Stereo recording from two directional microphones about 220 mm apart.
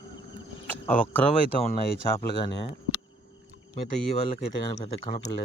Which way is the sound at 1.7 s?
25° left (ahead or behind).